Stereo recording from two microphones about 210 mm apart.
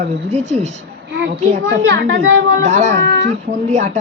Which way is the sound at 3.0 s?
55° right (ahead or behind).